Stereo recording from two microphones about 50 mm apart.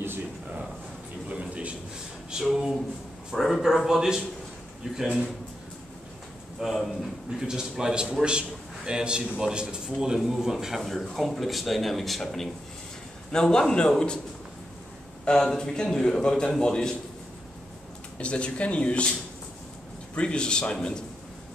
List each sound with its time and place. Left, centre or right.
1.3 s a sound: right
2.3 s speech: centre
3.3 s a man's voice: centre
6.6 s a man's voice: centre
13.3 s a man's voice: centre
15.2 s a man's voice: centre
18.1 s speech: left
20.2 s a man's voice: centre